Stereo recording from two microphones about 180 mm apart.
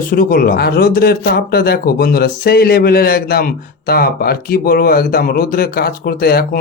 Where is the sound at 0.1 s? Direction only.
55° left (ahead or behind).